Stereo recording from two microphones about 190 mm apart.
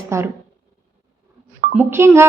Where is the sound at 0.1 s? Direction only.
15° right (ahead or behind).